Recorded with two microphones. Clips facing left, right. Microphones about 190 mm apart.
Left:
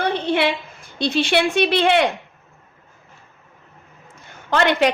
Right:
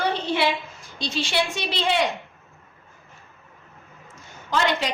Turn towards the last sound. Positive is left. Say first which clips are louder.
# left 6 dB
turn(degrees=60)  # may be behind; listen again after turning